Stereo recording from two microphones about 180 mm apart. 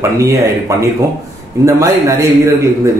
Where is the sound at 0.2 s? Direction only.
15° right (ahead or behind).